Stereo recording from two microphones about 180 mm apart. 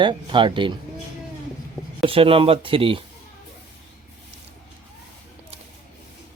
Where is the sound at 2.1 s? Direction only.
30° right (ahead or behind).